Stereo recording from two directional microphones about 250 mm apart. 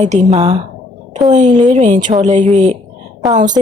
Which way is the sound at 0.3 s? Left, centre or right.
Right.